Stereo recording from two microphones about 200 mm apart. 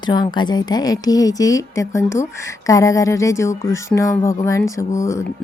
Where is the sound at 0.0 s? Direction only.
20° left (ahead or behind).